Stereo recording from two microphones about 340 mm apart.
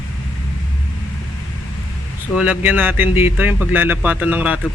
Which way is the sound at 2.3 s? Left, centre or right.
Centre.